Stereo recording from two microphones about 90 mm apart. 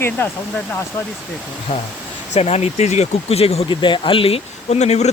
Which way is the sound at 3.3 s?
75° left (ahead or behind).